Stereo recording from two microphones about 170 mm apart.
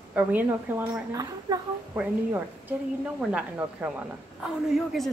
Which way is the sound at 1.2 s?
20° right (ahead or behind).